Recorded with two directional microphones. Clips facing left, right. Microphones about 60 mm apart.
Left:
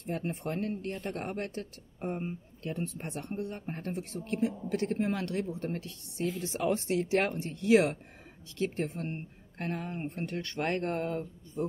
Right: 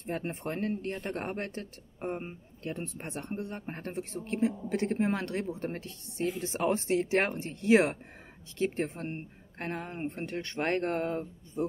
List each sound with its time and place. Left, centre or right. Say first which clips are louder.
0.0 s speech: even; right